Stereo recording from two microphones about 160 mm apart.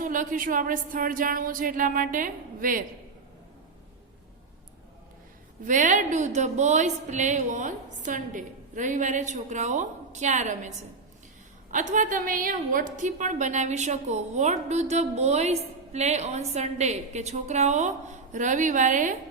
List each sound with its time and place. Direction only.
0.0 s speech: 55° right (ahead or behind)
5.6 s a woman's voice: 55° right (ahead or behind)